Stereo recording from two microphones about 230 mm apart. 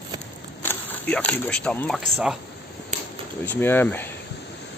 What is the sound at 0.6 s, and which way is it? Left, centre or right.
Speech, centre.